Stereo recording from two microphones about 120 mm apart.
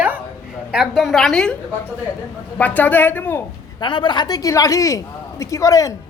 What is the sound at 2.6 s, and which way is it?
Speech, 15° left (ahead or behind).